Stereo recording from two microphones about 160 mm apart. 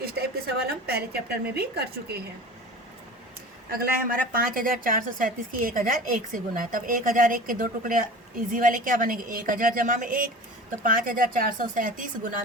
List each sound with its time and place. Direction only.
0.0 s a woman's voice: 75° right (ahead or behind); by 2.2 s 90° right
3.8 s a woman's voice: 60° right (ahead or behind)